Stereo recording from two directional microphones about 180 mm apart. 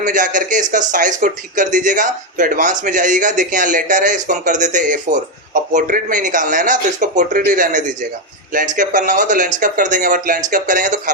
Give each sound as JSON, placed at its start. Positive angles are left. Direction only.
{"t": 0.0, "sound": "speech", "side_deg": -45}